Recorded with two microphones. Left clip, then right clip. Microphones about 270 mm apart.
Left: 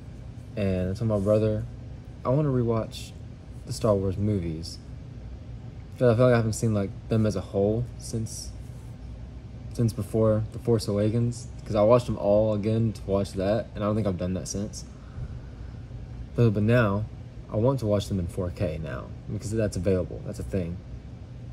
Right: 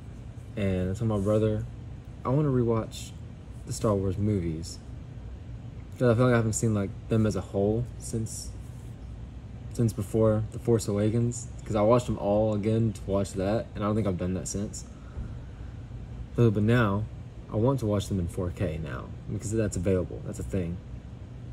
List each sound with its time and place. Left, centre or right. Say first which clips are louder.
0.6 s speech: left 2 dB; centre
5.9 s speech: left 3 dB; centre
9.8 s speech: even; centre
16.3 s speech: left 2 dB; centre